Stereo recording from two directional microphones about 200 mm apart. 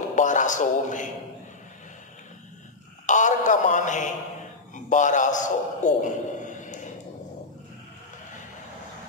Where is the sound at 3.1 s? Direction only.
40° left (ahead or behind).